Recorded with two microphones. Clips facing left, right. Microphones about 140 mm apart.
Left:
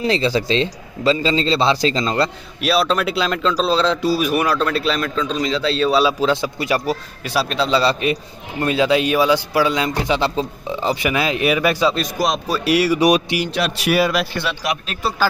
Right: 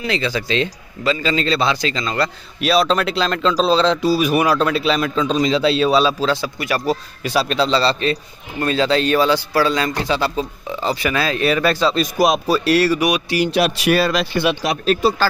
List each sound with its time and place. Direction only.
0.0 s a man's voice: 30° left (ahead or behind)
2.6 s speech: 5° left (ahead or behind); by 5.9 s 15° right (ahead or behind)
5.9 s speech: 5° left (ahead or behind)
6.1 s a man's voice: 20° left (ahead or behind)
6.9 s a man's voice: centre (ahead or behind)
12.0 s speech: 5° right (ahead or behind)
12.6 s a man's voice: 10° left (ahead or behind)
13.6 s speech: 5° right (ahead or behind)
13.9 s a man's voice: 10° left (ahead or behind)
14.3 s speech: 15° right (ahead or behind)
14.6 s speech: 35° right (ahead or behind)